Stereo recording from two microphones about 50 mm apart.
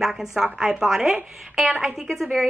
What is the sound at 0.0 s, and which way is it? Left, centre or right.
A woman's voice, centre.